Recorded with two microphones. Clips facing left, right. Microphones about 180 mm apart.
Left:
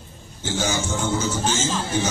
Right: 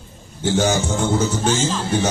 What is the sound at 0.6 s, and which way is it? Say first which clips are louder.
Speech: right 4 dB; 60° right (ahead or behind).